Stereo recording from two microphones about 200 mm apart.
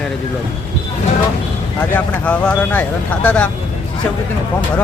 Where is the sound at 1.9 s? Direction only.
5° left (ahead or behind).